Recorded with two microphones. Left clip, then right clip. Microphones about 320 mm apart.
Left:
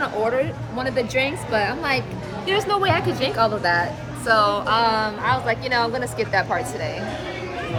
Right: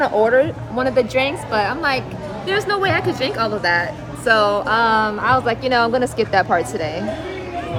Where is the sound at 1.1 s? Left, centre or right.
Centre.